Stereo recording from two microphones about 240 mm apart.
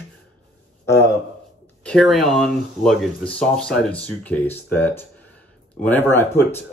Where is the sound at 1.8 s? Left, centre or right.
Centre.